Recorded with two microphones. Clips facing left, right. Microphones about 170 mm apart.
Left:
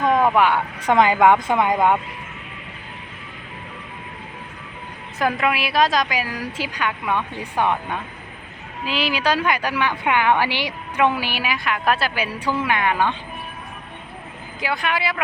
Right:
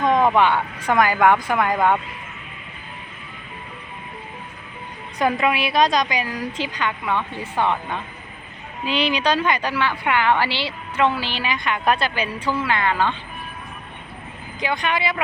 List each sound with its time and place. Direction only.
0.0 s vehicle: 5° left (ahead or behind)
0.9 s speech: 20° left (ahead or behind)
5.2 s a woman's voice: centre (ahead or behind)
14.6 s speech: 5° left (ahead or behind)